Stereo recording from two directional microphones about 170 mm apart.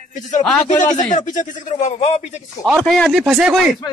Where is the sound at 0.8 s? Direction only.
45° left (ahead or behind).